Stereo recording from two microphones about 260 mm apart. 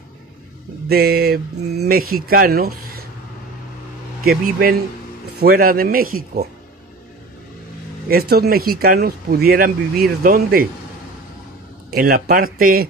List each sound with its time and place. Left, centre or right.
0.8 s speech: right
4.2 s speech: right
8.1 s speech: right
11.9 s speech: right